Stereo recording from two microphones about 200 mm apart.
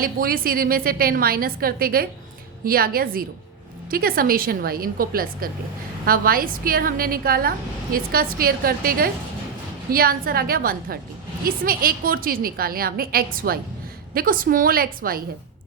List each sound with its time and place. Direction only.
0.0 s a woman's voice: 50° right (ahead or behind)